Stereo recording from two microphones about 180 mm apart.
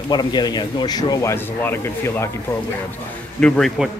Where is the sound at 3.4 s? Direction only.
Centre (ahead or behind).